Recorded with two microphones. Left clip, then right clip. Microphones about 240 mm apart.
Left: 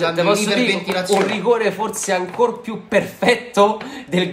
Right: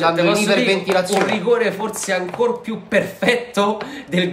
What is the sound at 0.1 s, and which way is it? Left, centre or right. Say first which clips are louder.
Speech: even; centre.